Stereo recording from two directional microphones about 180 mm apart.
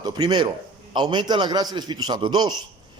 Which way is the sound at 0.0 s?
25° right (ahead or behind).